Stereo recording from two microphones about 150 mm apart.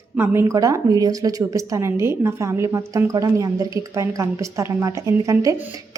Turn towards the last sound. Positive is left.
turn(degrees=-20)  # may be behind; listen again after turning